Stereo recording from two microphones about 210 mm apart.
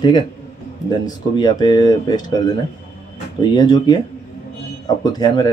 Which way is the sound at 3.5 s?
20° left (ahead or behind).